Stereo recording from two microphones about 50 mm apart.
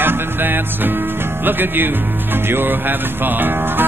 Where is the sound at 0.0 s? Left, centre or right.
Right.